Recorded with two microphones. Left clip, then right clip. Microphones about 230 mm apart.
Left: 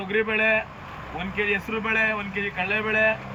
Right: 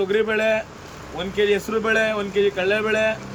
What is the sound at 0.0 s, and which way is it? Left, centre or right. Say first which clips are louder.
Speech: right 3 dB; centre.